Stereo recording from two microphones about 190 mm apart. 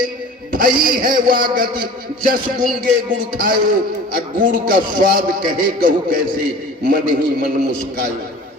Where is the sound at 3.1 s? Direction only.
45° right (ahead or behind).